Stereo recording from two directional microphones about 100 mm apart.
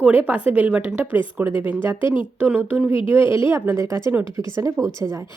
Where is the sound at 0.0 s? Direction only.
15° right (ahead or behind); by 4.9 s 35° right (ahead or behind).